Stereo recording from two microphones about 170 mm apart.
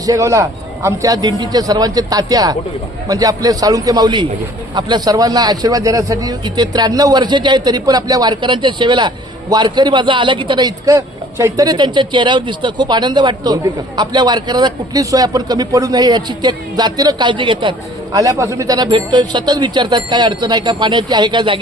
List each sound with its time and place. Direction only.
0.0 s a man's voice: 20° right (ahead or behind)